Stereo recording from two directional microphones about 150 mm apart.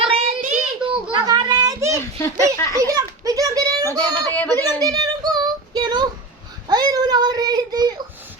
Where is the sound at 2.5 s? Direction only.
20° left (ahead or behind).